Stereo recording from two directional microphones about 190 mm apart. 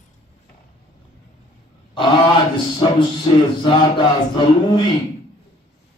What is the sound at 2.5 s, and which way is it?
Speech, 25° left (ahead or behind).